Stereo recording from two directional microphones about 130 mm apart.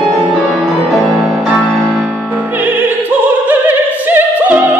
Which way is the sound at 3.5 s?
15° right (ahead or behind).